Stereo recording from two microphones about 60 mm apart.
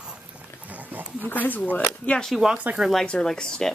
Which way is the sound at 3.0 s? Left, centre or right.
Centre.